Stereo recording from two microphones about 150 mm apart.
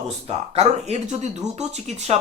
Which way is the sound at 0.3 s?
45° right (ahead or behind).